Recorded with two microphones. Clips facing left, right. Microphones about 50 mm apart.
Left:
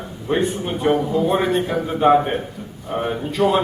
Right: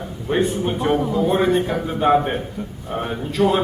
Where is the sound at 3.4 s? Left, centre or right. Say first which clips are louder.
Even; left.